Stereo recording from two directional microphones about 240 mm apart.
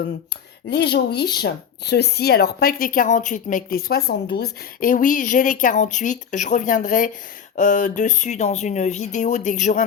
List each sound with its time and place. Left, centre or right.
0.7 s speech: left